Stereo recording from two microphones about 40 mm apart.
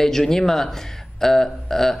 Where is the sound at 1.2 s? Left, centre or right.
Centre.